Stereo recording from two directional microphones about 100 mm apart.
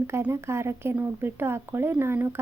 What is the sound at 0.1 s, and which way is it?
Speech, 25° right (ahead or behind).